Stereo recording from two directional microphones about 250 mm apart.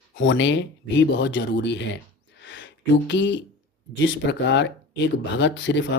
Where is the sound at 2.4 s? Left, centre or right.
Left.